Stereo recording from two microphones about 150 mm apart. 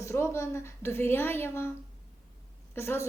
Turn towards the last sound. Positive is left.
turn(degrees=15)  # may be behind; listen again after turning